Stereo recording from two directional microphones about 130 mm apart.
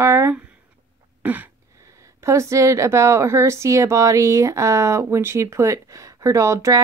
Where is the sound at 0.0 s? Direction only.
20° right (ahead or behind).